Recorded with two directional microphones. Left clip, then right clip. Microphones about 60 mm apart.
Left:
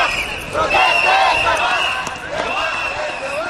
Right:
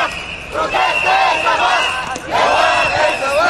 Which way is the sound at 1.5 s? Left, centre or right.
Right.